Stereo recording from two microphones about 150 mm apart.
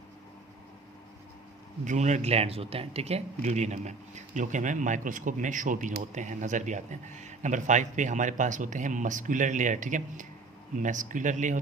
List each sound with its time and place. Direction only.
1.8 s speech: 55° right (ahead or behind)